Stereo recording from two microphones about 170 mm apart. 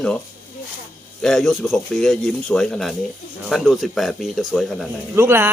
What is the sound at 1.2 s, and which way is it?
Speech, centre (ahead or behind).